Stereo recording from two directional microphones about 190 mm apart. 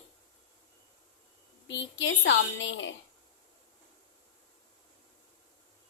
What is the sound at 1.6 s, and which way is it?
A woman's voice, 75° left (ahead or behind).